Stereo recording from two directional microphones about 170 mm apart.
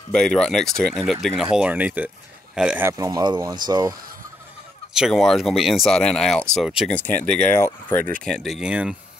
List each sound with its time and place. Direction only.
0.1 s speech: 5° left (ahead or behind); by 3.9 s 25° right (ahead or behind)
4.9 s speech: centre (ahead or behind)
6.9 s speech: 10° left (ahead or behind)